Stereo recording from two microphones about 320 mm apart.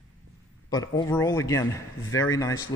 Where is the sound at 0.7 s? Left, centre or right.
Centre.